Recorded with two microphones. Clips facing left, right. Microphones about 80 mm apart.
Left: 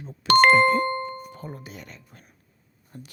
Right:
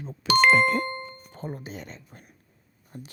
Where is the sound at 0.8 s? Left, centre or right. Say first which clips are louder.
Left 7 dB; left.